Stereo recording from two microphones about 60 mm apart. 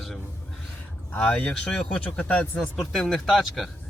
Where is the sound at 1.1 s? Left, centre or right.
Left.